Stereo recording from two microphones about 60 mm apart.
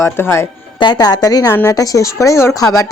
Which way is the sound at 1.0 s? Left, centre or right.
Left.